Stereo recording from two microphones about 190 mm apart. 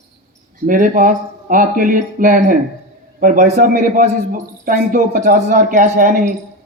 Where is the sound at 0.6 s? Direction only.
45° right (ahead or behind).